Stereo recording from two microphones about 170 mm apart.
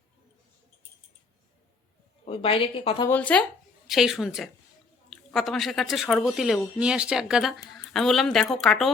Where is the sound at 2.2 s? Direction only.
35° left (ahead or behind).